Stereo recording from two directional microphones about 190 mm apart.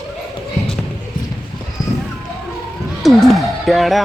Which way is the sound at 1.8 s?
Centre (ahead or behind).